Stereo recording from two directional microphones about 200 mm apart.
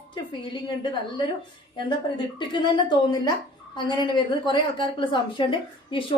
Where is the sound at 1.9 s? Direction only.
25° left (ahead or behind).